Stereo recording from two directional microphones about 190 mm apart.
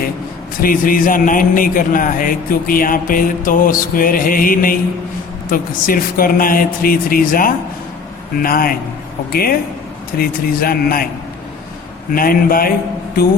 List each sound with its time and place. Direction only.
0.6 s a man's voice: 45° left (ahead or behind)
12.1 s a man's voice: 50° left (ahead or behind)